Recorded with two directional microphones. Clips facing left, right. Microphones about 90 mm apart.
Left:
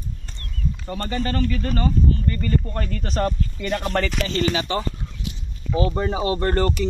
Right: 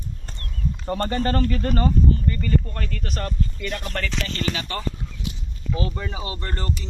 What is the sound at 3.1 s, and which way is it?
Speech, 30° left (ahead or behind).